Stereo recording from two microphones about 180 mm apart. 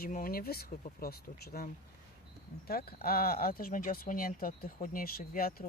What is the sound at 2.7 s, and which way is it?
Speech, 55° left (ahead or behind).